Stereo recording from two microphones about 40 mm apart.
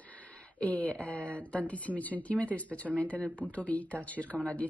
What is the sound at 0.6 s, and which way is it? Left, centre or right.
A woman's voice, left.